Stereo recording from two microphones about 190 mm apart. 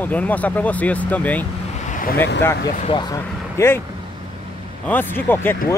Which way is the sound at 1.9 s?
45° left (ahead or behind).